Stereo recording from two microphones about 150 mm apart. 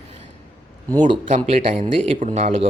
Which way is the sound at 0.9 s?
30° right (ahead or behind).